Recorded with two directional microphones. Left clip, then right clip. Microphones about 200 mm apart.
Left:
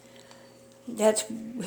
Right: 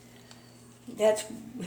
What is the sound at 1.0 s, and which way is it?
Speech, 40° left (ahead or behind).